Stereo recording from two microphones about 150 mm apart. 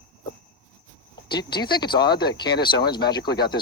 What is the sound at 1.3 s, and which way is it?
Speech, 30° left (ahead or behind).